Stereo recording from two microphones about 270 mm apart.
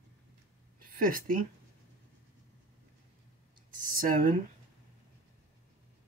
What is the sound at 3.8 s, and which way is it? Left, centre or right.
Speech, right.